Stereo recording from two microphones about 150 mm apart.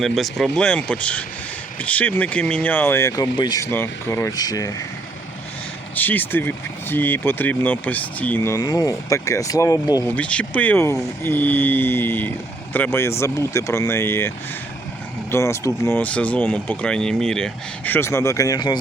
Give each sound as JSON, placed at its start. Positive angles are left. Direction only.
{"t": 0.0, "sound": "speech", "side_deg": 0}
{"t": 3.7, "sound": "speech", "side_deg": 15}
{"t": 6.0, "sound": "speech", "side_deg": 10}
{"t": 8.5, "sound": "speech", "side_deg": 25}
{"t": 10.1, "sound": "speech", "side_deg": 10}
{"t": 17.9, "sound": "speech", "side_deg": 15}